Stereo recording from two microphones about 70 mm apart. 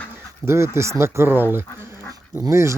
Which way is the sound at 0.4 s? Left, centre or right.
Right.